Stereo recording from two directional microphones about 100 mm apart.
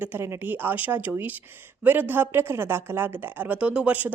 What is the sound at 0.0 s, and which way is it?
A woman's voice, 20° right (ahead or behind).